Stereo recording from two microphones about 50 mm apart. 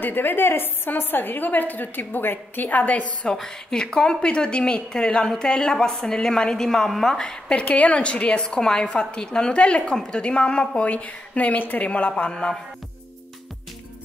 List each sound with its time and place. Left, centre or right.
0.0 s a woman's voice: left
3.3 s a woman's voice: centre; by 11.9 s left
11.9 s a woman's voice: left